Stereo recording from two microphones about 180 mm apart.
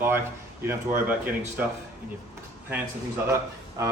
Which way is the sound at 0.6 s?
10° right (ahead or behind).